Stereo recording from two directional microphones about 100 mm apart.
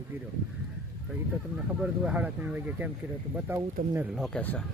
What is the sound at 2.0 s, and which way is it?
Speech, 15° right (ahead or behind).